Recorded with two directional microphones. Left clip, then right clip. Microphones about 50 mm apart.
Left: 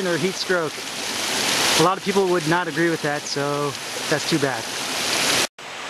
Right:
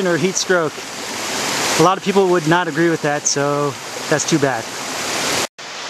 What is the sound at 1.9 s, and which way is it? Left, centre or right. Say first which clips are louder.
Speech: right 5 dB; right.